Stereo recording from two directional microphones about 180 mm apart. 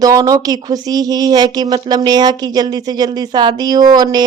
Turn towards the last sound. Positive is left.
turn(degrees=-20)  # may be behind; listen again after turning